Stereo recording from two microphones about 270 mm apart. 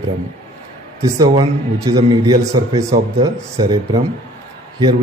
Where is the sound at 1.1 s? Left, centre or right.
Centre.